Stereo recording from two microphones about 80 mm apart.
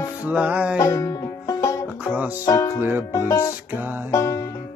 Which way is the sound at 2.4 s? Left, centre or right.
Left.